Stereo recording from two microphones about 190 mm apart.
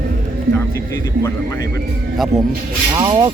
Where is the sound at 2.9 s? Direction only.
25° right (ahead or behind).